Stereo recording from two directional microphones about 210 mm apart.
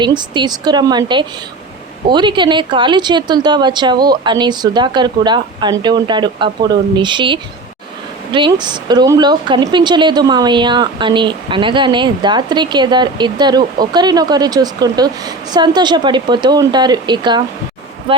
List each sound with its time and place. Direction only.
0.0 s speech: 20° right (ahead or behind)